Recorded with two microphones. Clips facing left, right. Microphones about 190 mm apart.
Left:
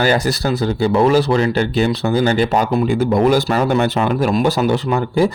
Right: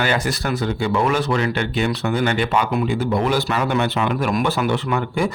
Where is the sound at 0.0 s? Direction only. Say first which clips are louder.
Left 5 dB; 35° left (ahead or behind).